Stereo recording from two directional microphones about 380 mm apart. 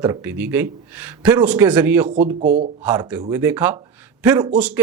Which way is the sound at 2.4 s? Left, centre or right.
Right.